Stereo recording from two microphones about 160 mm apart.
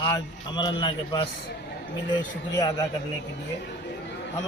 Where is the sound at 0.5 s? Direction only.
30° left (ahead or behind).